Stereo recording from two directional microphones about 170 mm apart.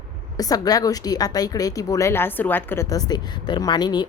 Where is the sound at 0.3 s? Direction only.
20° left (ahead or behind).